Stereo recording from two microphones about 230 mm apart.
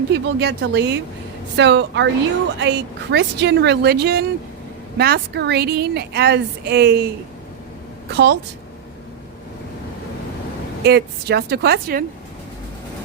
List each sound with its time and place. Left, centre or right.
0.1 s a woman's voice: right
8.1 s a woman's voice: right
10.8 s a woman's voice: right